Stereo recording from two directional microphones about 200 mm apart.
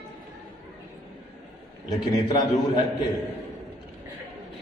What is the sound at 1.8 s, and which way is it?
Speech, 20° left (ahead or behind).